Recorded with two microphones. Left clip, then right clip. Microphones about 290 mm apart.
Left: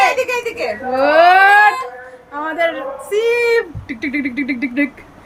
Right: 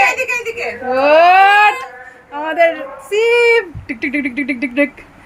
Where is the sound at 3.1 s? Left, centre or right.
Centre.